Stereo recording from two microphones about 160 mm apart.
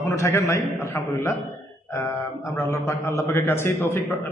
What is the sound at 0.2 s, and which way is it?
A man's voice, 20° left (ahead or behind).